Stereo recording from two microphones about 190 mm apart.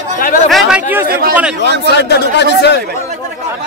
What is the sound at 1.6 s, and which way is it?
Speech, 60° left (ahead or behind).